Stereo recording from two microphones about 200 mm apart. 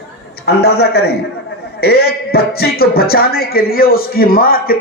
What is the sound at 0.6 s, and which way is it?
Speech, 55° left (ahead or behind).